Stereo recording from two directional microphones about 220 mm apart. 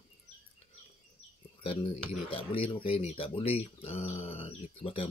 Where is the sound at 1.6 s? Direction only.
25° left (ahead or behind).